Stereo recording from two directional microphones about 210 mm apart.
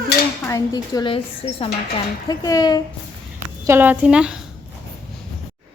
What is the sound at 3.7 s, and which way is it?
Speech, 10° right (ahead or behind).